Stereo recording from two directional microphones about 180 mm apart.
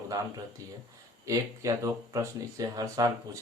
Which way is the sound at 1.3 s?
20° right (ahead or behind).